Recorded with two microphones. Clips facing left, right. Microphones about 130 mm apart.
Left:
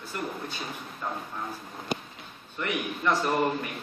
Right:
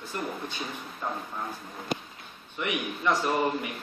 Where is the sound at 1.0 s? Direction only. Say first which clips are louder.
Right 1 dB; 5° right (ahead or behind).